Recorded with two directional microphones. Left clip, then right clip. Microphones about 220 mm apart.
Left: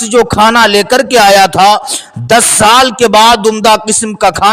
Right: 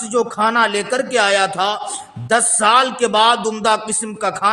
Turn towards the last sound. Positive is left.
turn(degrees=45)  # may be behind; listen again after turning